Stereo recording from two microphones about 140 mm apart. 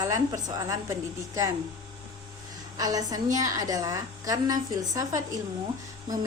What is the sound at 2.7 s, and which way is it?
A woman's voice, 25° right (ahead or behind).